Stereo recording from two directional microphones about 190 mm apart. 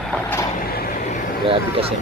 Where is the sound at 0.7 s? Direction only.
50° left (ahead or behind).